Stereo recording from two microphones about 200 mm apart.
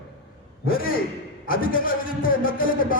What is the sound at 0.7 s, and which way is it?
A man's voice, 45° left (ahead or behind).